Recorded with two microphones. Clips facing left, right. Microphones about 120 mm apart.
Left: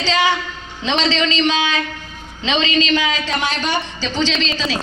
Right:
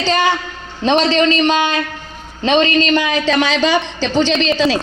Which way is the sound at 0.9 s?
50° right (ahead or behind).